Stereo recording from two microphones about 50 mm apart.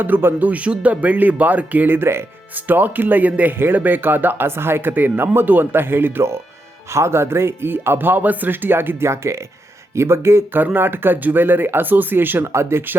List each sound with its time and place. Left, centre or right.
0.0 s speech: right
0.4 s speech: right
2.0 s speech: right
2.6 s speech: right
4.4 s speech: right
6.9 s speech: right
9.0 s speech: right
10.8 s speech: right
12.5 s speech: right